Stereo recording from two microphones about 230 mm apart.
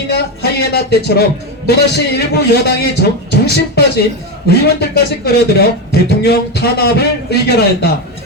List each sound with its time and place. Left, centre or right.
0.1 s speech: left